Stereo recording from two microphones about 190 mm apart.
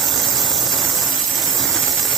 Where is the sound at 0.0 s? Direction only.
Centre (ahead or behind).